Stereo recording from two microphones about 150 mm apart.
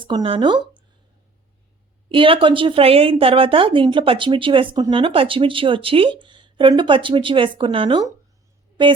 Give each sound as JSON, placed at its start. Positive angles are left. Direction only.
{"t": 0.0, "sound": "speech", "side_deg": -30}
{"t": 2.0, "sound": "a woman's voice", "side_deg": -35}